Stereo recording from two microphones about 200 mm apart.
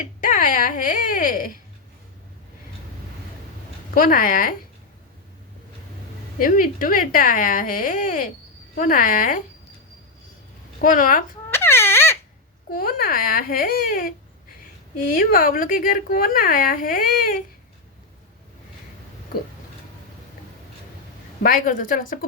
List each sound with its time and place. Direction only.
0.2 s speech: 40° left (ahead or behind)
3.9 s speech: 45° left (ahead or behind)
6.4 s speech: 40° left (ahead or behind)
10.8 s a child's voice: 40° left (ahead or behind)
11.5 s a sound: 10° left (ahead or behind)
12.7 s speech: 45° left (ahead or behind)
15.1 s speech: 45° left (ahead or behind)
21.4 s speech: 45° left (ahead or behind)